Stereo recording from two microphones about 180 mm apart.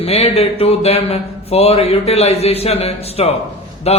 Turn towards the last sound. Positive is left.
turn(degrees=35)  # may be behind; listen again after turning